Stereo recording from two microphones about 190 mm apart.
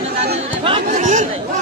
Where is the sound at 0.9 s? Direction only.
40° right (ahead or behind).